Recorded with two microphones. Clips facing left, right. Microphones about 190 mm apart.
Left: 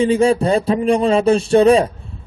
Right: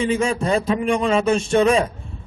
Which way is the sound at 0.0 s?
35° left (ahead or behind).